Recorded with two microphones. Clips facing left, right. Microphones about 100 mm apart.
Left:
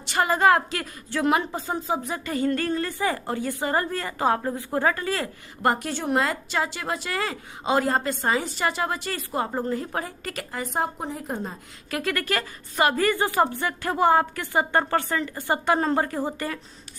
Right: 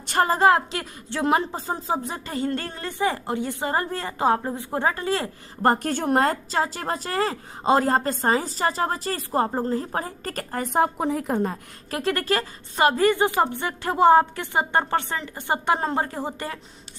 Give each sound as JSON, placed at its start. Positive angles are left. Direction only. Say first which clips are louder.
{"t": 0.0, "sound": "a sound", "louder": "right 2 dB", "side_deg": -45}
{"t": 0.3, "sound": "a woman's voice", "louder": "even", "side_deg": -25}
{"t": 5.6, "sound": "a woman's voice", "louder": "right 3 dB", "side_deg": -40}
{"t": 11.9, "sound": "a woman's voice", "louder": "right 3 dB", "side_deg": -30}